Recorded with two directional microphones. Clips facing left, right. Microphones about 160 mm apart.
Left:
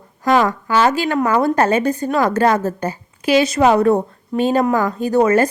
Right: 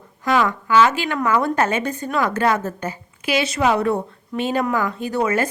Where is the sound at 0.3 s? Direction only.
40° left (ahead or behind).